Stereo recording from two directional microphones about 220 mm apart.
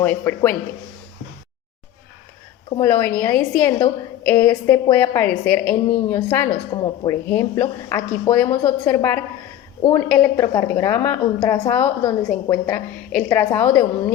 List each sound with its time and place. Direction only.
0.0 s a woman's voice: 10° left (ahead or behind)
2.8 s a woman's voice: 10° left (ahead or behind)
6.5 s a woman's voice: 25° left (ahead or behind)
7.1 s a woman's voice: 10° left (ahead or behind)